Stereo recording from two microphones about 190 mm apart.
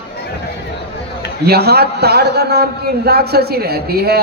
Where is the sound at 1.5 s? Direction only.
55° right (ahead or behind).